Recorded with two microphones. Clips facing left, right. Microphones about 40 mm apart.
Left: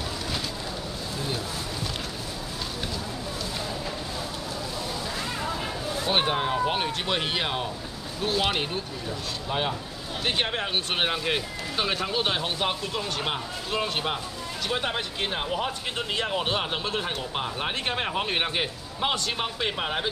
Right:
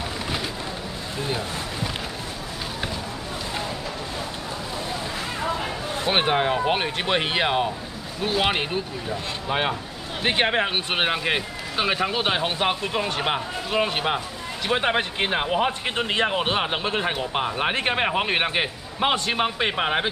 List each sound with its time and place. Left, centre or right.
5.4 s speech: right